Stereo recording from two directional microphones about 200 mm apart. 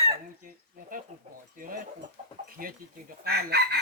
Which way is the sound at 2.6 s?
45° right (ahead or behind).